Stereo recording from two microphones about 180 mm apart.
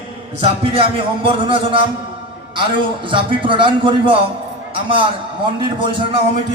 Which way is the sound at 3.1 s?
25° right (ahead or behind).